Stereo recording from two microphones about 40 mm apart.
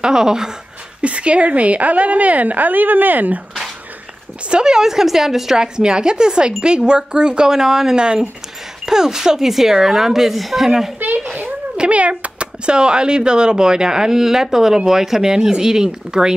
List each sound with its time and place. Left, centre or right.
0.0 s speech: centre
1.0 s a woman's voice: right
4.5 s speech: centre
5.6 s speech: right
8.0 s speech: right; by 10.7 s centre
11.7 s speech: right